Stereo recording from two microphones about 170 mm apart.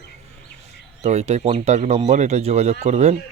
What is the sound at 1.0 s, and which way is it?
Speech, 40° right (ahead or behind).